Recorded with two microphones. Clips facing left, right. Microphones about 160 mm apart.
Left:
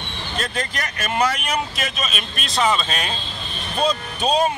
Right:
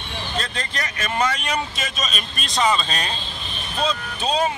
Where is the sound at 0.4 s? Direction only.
10° left (ahead or behind).